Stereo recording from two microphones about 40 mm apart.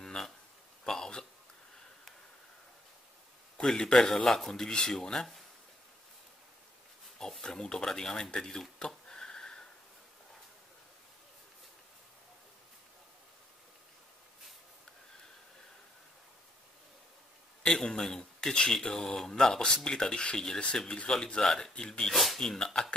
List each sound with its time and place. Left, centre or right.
0.0 s a sound: centre
3.6 s speech: centre
7.2 s speech: centre
8.8 s a sound: centre
17.7 s speech: centre
22.1 s speech: centre
22.4 s speech: centre